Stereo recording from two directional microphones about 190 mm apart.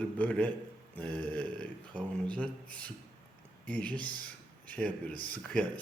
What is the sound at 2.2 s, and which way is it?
Speech, 5° left (ahead or behind).